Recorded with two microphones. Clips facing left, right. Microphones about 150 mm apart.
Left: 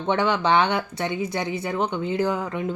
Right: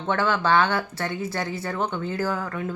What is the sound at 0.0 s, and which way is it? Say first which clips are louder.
A woman's voice: left 2 dB; 20° left (ahead or behind).